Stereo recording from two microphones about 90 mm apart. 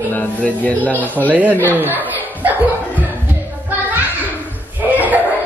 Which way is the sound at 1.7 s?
20° right (ahead or behind).